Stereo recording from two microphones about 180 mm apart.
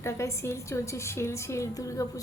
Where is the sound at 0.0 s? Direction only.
15° left (ahead or behind).